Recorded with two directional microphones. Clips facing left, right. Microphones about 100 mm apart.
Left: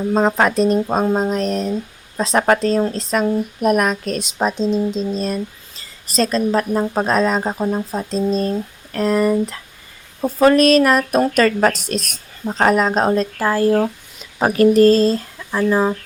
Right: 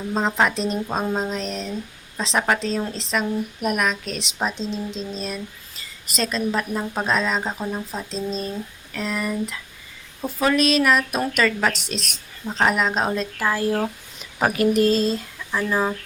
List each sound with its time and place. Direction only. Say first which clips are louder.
0.1 s a woman's voice: left 5 dB; 45° left (ahead or behind)
15.5 s speech: left 6 dB; 25° left (ahead or behind)